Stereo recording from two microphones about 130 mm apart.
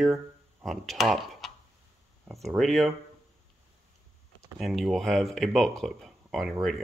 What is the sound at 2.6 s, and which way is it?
Speech, centre (ahead or behind).